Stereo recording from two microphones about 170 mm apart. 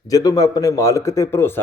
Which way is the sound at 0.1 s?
20° left (ahead or behind).